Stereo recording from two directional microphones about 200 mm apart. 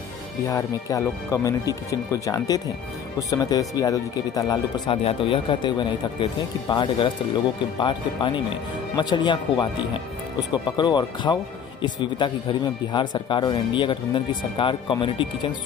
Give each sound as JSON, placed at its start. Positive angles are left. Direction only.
{"t": 0.5, "sound": "speech", "side_deg": 15}